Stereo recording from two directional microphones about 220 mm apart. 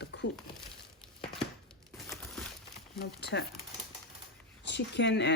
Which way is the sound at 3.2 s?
50° left (ahead or behind).